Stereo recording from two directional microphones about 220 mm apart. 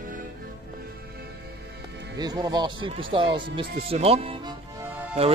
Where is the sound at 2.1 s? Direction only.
20° right (ahead or behind).